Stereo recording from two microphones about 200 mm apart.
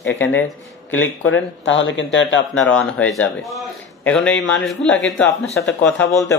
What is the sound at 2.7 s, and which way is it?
A man's voice, 5° left (ahead or behind).